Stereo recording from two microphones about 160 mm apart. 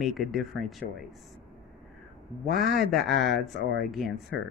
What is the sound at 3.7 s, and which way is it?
Speech, centre (ahead or behind).